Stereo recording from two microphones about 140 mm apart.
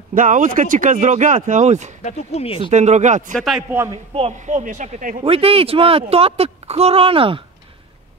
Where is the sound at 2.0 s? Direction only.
50° left (ahead or behind).